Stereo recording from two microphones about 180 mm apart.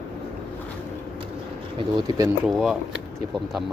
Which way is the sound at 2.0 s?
20° right (ahead or behind).